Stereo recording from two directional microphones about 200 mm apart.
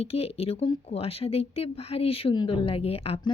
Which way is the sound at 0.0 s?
30° left (ahead or behind).